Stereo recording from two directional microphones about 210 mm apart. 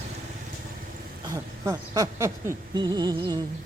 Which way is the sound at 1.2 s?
15° right (ahead or behind).